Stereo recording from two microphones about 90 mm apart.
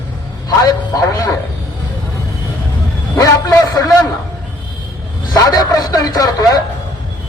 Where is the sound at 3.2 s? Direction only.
45° left (ahead or behind).